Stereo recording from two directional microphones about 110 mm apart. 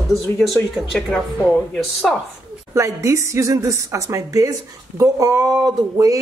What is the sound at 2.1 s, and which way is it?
Speech, centre (ahead or behind).